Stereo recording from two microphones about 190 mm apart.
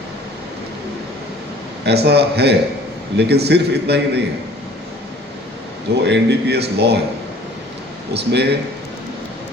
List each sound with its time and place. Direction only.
1.8 s a man's voice: 60° right (ahead or behind)
6.0 s a man's voice: 65° right (ahead or behind)
8.1 s a man's voice: 60° right (ahead or behind)